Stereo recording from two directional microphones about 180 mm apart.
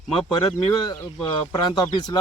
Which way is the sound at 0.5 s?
20° left (ahead or behind).